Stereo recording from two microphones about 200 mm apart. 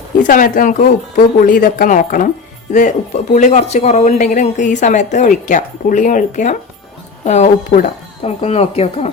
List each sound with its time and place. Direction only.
0.3 s speech: 45° left (ahead or behind)